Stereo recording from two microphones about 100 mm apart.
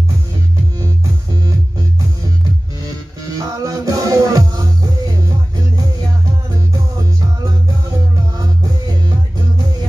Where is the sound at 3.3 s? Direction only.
35° right (ahead or behind).